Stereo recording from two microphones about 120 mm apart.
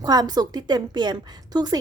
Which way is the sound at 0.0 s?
35° right (ahead or behind).